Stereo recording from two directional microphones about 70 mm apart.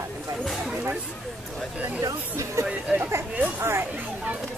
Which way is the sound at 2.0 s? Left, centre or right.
Right.